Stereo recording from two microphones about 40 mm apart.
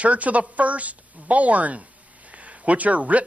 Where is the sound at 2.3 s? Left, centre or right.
Right.